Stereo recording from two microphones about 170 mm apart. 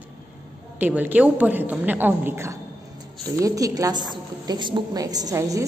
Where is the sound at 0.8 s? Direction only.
10° right (ahead or behind).